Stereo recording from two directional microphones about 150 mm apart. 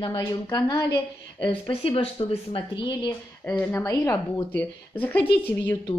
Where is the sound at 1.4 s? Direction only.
35° left (ahead or behind).